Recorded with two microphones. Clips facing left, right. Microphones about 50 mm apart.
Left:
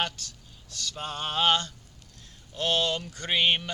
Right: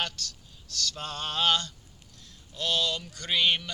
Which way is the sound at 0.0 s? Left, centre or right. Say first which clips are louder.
Left 2 dB; left.